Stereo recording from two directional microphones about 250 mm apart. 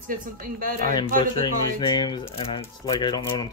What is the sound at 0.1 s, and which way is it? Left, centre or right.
Speech, right.